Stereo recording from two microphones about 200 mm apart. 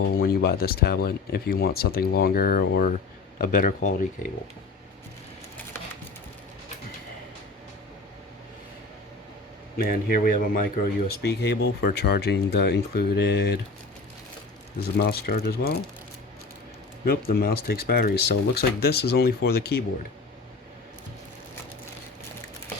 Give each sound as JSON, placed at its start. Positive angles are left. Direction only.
{"t": 0.1, "sound": "speech", "side_deg": 50}
{"t": 9.7, "sound": "speech", "side_deg": 45}
{"t": 11.2, "sound": "speech", "side_deg": 55}
{"t": 14.9, "sound": "speech", "side_deg": 50}
{"t": 17.1, "sound": "speech", "side_deg": 50}